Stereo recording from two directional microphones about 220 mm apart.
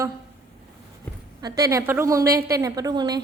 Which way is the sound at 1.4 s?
15° right (ahead or behind).